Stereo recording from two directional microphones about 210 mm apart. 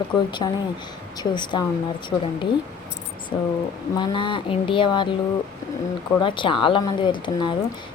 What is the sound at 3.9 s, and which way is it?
Speech, 20° left (ahead or behind).